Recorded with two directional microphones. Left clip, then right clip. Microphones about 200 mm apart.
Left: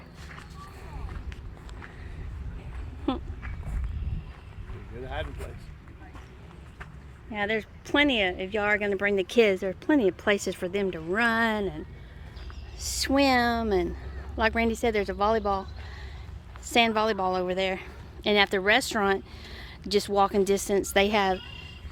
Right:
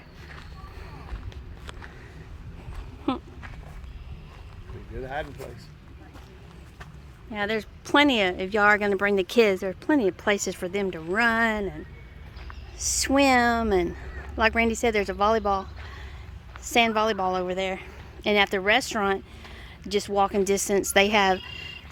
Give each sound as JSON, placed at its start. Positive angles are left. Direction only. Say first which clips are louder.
{"t": 3.1, "sound": "speech", "louder": "right 2 dB", "side_deg": -10}
{"t": 7.3, "sound": "a woman's voice", "louder": "right 1 dB", "side_deg": -15}
{"t": 12.8, "sound": "a woman's voice", "louder": "right 3 dB", "side_deg": -20}